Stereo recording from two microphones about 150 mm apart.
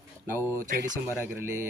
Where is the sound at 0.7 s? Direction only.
60° right (ahead or behind).